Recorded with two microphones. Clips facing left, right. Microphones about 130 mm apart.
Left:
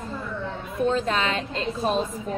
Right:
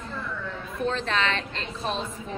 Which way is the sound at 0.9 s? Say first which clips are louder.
Left 2 dB; 10° left (ahead or behind).